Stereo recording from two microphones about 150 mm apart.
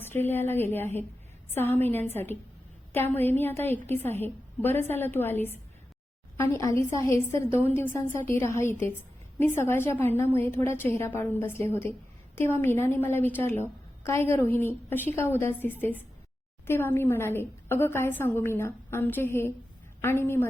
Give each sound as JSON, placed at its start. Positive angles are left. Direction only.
{"t": 0.0, "sound": "a woman's voice", "side_deg": 15}